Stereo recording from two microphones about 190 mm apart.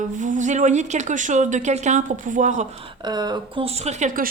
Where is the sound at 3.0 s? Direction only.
20° right (ahead or behind); by 4.3 s 45° right (ahead or behind).